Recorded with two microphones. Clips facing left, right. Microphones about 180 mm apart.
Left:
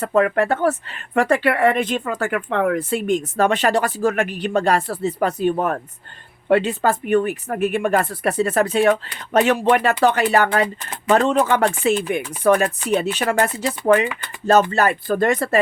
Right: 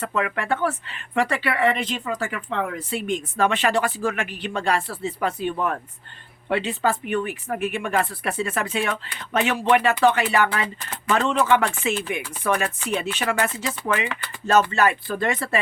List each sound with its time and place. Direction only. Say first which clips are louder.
0.0 s speech: left 8 dB; 40° left (ahead or behind)